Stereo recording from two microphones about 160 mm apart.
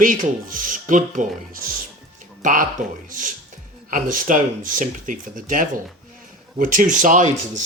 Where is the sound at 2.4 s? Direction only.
55° right (ahead or behind).